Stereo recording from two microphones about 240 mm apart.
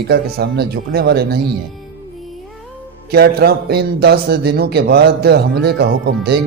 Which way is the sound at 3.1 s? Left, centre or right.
Right.